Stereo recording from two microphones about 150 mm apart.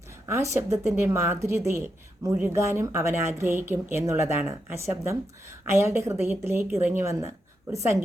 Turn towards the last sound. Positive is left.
turn(degrees=-20)  # may be behind; listen again after turning